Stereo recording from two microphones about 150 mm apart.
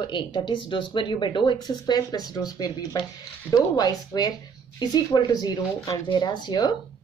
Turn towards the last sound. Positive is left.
turn(degrees=30)  # may be behind; listen again after turning